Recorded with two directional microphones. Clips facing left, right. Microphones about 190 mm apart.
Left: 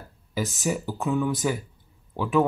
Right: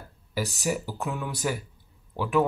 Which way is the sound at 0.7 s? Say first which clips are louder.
Left 4 dB; 5° right (ahead or behind).